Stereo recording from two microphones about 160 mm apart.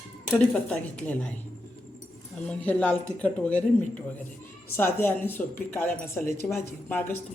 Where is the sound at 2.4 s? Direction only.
5° left (ahead or behind).